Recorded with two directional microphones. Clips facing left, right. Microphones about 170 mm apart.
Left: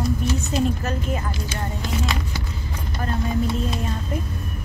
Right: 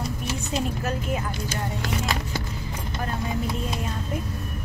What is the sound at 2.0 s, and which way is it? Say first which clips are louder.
Vehicle: left 1 dB; 40° right (ahead or behind).